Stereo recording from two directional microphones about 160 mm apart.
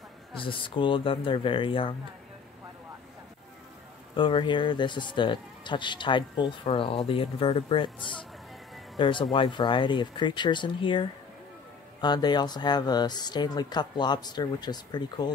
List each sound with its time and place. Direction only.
0.4 s speech: 30° left (ahead or behind)
4.2 s speech: 30° left (ahead or behind)